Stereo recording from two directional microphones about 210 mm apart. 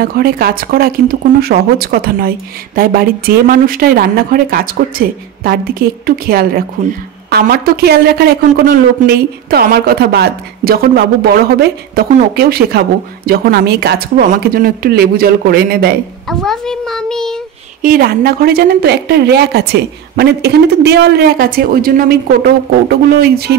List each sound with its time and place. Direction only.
0.0 s speech: 45° right (ahead or behind)
16.3 s a child's voice: centre (ahead or behind)
17.8 s speech: 45° right (ahead or behind)